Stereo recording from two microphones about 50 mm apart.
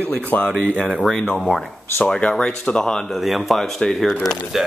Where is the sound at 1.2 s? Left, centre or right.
Centre.